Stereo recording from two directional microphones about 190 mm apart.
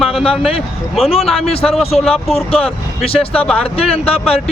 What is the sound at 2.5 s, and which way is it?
Speech, 30° left (ahead or behind).